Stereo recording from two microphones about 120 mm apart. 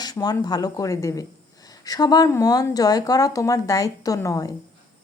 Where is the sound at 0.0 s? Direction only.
35° left (ahead or behind).